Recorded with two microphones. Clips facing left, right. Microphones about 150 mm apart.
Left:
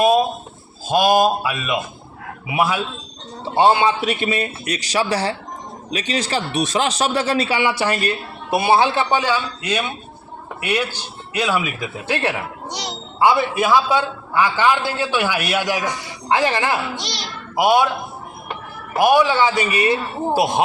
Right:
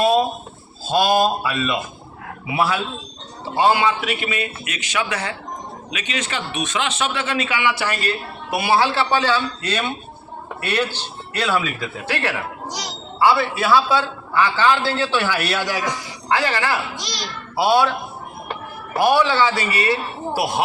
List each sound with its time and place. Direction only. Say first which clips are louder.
0.9 s a child's voice: left 2 dB; 15° left (ahead or behind)
3.5 s a man's voice: left 2 dB; 25° left (ahead or behind)
7.9 s a child's voice: left 3 dB; 20° left (ahead or behind)
17.6 s a child's voice: left 1 dB; 15° left (ahead or behind)
18.9 s a child's voice: left 2 dB; 15° left (ahead or behind)